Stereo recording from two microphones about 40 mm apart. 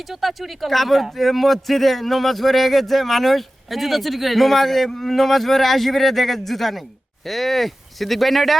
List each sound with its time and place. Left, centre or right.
0.1 s speech: centre